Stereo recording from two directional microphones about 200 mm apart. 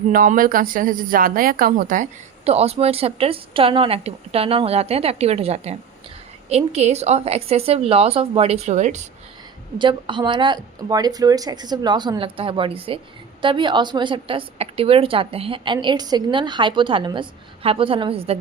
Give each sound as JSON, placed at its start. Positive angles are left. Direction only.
{"t": 0.1, "sound": "a woman's voice", "side_deg": -45}
{"t": 9.7, "sound": "a woman's voice", "side_deg": -25}